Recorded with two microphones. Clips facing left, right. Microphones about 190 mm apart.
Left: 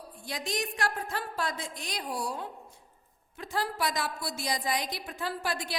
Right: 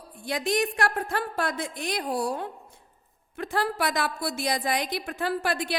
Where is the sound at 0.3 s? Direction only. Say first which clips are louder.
Right 8 dB; 60° right (ahead or behind).